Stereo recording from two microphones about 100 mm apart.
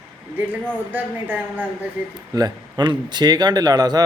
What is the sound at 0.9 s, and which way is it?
Speech, 20° right (ahead or behind).